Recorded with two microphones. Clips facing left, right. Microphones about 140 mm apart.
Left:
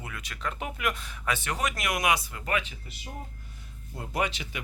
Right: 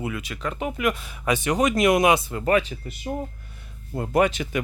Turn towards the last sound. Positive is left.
turn(degrees=-50)  # may be behind; listen again after turning